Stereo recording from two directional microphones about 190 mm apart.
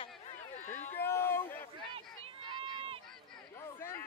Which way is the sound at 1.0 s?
10° left (ahead or behind).